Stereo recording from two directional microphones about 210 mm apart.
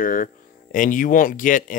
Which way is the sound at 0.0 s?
40° left (ahead or behind).